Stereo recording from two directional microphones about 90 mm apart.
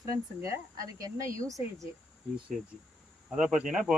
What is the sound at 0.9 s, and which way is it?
Speech, 40° right (ahead or behind).